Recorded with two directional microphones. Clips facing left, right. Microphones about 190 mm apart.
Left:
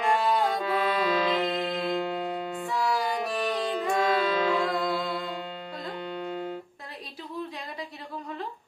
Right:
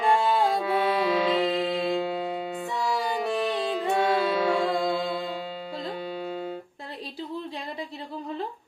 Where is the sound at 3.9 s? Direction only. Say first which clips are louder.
Right 1 dB; 5° right (ahead or behind).